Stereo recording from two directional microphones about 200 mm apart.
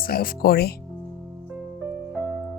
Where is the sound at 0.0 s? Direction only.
45° left (ahead or behind).